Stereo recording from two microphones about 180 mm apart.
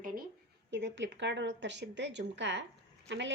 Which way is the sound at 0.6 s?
80° right.